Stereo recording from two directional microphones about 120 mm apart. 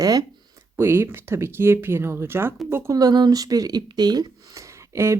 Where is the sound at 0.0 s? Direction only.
30° right (ahead or behind).